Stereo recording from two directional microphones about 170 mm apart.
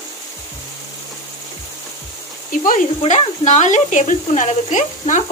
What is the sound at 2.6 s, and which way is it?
Speech, 45° left (ahead or behind).